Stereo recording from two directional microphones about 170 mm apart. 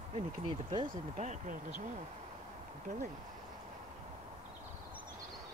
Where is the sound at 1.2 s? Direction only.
45° right (ahead or behind).